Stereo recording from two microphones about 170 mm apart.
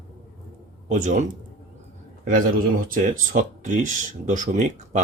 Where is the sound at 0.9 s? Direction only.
45° right (ahead or behind).